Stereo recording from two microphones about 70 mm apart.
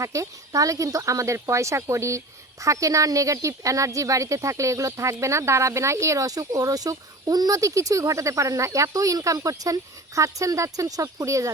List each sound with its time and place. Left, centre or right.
0.0 s speech: right